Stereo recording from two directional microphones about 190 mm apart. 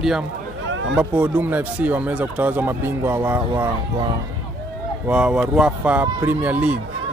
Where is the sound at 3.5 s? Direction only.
20° right (ahead or behind).